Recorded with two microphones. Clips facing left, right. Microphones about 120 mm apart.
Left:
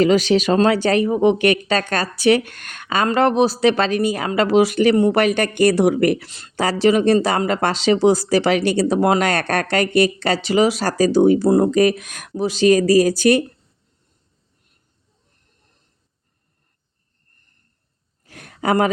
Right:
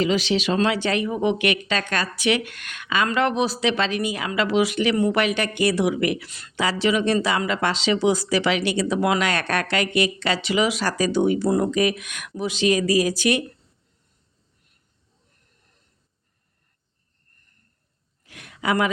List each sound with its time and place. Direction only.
0.0 s speech: 45° left (ahead or behind)
6.2 s speech: 30° left (ahead or behind)
18.3 s a sound: 40° left (ahead or behind)